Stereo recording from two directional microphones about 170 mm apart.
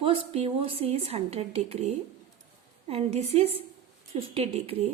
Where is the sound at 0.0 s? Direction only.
35° right (ahead or behind).